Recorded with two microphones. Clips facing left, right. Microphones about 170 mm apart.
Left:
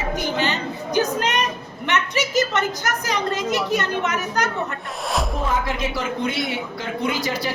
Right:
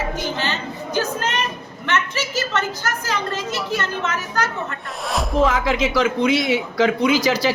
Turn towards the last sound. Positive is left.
turn(degrees=-90)